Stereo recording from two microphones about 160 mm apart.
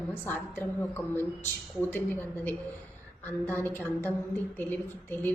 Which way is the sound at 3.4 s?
10° left (ahead or behind).